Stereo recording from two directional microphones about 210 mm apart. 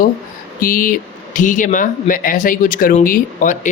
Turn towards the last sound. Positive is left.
turn(degrees=40)  # may be behind; listen again after turning